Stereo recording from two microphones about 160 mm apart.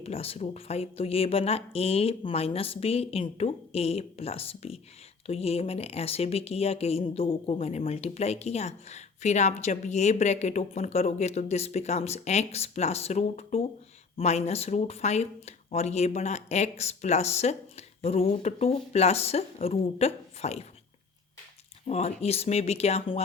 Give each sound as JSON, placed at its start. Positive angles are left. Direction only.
{"t": 0.0, "sound": "speech", "side_deg": 40}
{"t": 21.8, "sound": "speech", "side_deg": 45}